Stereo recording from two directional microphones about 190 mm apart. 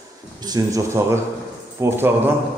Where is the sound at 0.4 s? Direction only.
20° right (ahead or behind).